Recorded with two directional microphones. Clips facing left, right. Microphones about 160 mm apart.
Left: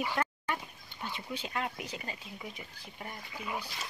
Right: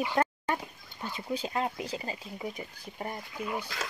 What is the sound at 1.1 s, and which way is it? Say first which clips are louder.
Speech: right 6 dB; 35° right (ahead or behind).